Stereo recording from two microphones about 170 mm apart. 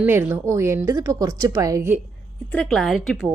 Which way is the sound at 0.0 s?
10° right (ahead or behind).